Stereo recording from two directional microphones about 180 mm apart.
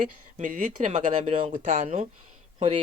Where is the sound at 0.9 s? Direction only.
30° right (ahead or behind).